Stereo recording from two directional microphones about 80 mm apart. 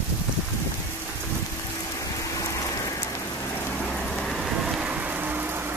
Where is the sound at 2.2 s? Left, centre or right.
Left.